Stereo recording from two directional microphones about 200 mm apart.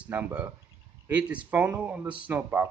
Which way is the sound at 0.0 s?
10° right (ahead or behind).